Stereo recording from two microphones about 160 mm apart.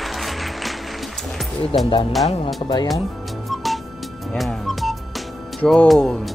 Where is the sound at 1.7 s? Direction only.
35° left (ahead or behind).